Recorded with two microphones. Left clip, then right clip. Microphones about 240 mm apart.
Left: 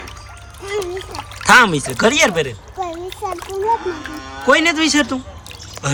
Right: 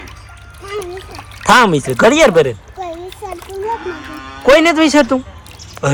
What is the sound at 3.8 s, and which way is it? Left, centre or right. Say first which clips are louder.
Livestock: even; left.